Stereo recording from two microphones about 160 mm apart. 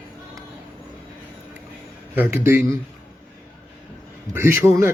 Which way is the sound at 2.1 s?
15° right (ahead or behind).